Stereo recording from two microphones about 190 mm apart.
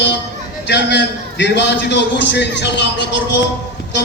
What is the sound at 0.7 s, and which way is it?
A man's voice, 65° left (ahead or behind).